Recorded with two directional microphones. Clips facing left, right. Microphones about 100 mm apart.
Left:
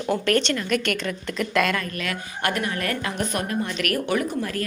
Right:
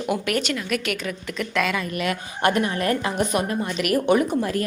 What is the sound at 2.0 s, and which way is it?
A woman's voice, 25° right (ahead or behind).